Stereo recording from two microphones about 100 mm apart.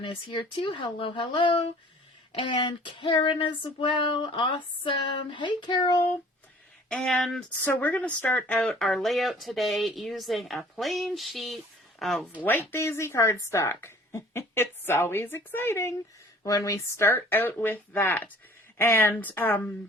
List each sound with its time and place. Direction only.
0.0 s female singing: 55° left (ahead or behind)
6.8 s a woman's voice: 5° left (ahead or behind)
7.6 s speech: 20° left (ahead or behind)
8.9 s a woman's voice: centre (ahead or behind)
12.4 s speech: 20° left (ahead or behind)